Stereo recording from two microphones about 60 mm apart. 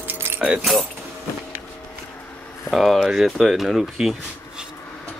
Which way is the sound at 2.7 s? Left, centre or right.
Centre.